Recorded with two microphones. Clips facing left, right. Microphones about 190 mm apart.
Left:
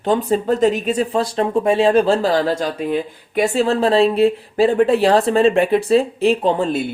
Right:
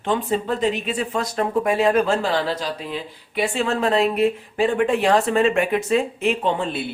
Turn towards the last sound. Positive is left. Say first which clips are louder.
# left 5 dB
turn(degrees=40)  # may be behind; listen again after turning